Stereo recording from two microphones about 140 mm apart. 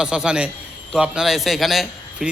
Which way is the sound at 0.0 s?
5° right (ahead or behind).